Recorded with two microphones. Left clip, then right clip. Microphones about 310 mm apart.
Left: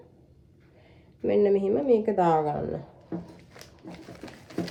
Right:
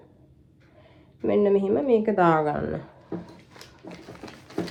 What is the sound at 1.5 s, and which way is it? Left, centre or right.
A woman's voice, centre.